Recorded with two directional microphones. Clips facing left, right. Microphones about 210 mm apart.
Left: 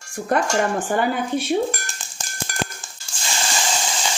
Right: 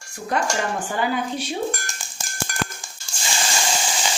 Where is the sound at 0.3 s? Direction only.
55° left (ahead or behind).